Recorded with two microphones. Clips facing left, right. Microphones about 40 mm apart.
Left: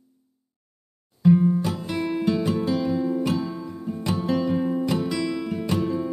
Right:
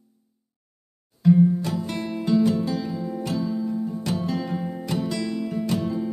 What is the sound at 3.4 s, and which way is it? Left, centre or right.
Music, left.